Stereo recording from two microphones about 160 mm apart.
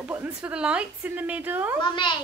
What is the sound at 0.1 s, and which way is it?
A woman's voice, 10° right (ahead or behind).